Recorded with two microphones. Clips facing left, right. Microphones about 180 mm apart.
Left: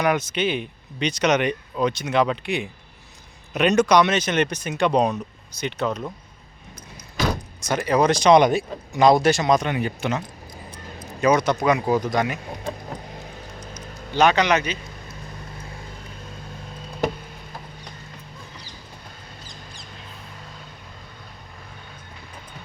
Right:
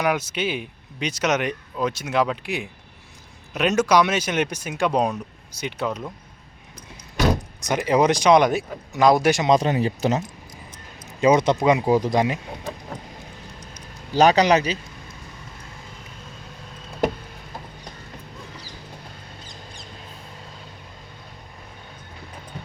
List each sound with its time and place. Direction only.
0.0 s speech: 10° right (ahead or behind)
7.6 s speech: 20° right (ahead or behind)
9.6 s speech: 30° right (ahead or behind)
14.1 s speech: 35° right (ahead or behind)